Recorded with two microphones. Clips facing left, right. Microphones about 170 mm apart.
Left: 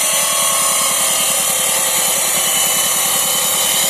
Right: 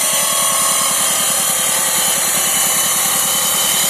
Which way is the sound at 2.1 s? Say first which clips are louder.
Left 1 dB; 15° left (ahead or behind).